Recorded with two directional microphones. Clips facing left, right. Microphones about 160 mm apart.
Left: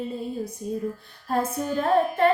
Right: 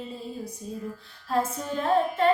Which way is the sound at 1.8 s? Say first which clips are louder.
Left 2 dB; 50° left (ahead or behind).